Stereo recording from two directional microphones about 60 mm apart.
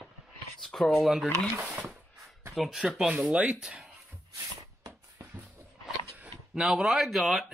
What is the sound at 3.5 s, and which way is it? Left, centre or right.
Speech, centre.